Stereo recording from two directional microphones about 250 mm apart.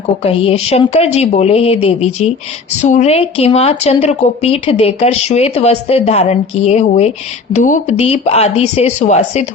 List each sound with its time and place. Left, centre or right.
0.3 s speech: left